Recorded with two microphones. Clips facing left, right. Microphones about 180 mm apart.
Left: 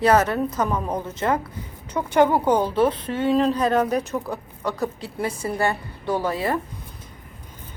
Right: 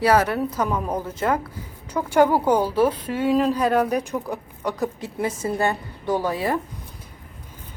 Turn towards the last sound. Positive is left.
turn(degrees=-15)  # may be behind; listen again after turning